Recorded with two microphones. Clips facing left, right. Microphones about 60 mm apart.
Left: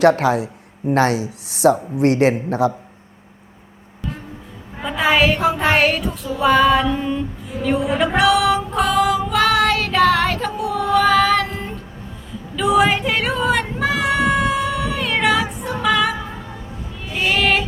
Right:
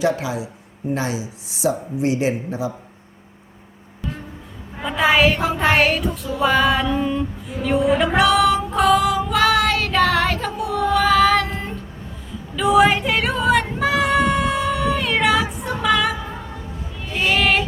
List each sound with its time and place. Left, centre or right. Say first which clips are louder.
0.0 s speech: left 7 dB; left
4.8 s a sound: even; centre
12.5 s female singing: right 1 dB; centre
17.1 s child singing: even; centre